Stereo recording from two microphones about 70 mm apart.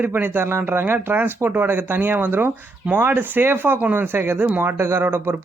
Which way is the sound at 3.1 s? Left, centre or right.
Right.